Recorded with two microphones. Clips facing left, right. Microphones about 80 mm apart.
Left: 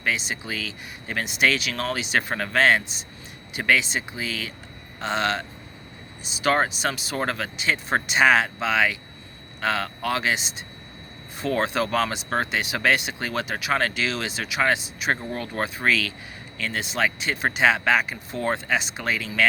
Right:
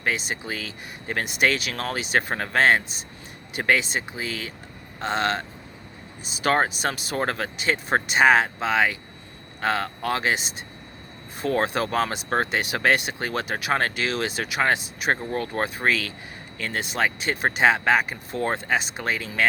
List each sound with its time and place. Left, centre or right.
0.0 s speech: right